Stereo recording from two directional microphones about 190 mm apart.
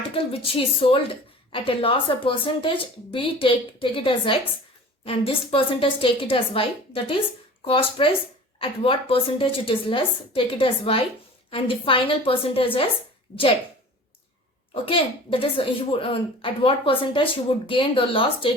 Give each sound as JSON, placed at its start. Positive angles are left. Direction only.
{"t": 0.1, "sound": "a woman's voice", "side_deg": 30}
{"t": 14.7, "sound": "a woman's voice", "side_deg": 30}